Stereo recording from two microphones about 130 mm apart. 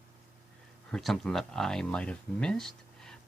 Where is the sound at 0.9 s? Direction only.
Centre (ahead or behind).